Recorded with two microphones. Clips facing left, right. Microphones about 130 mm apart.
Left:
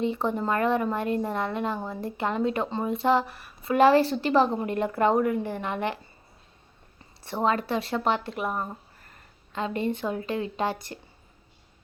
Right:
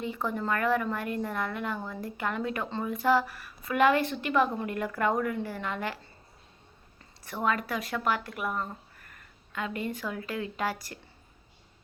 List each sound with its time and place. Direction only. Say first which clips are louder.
0.0 s a woman's voice: left 5 dB; 25° left (ahead or behind)
7.2 s a woman's voice: left 4 dB; 30° left (ahead or behind)